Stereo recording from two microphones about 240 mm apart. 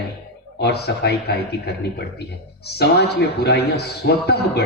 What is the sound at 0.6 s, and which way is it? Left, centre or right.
Speech, left.